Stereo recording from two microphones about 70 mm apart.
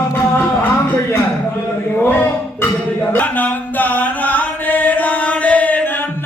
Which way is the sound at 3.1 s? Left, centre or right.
Left.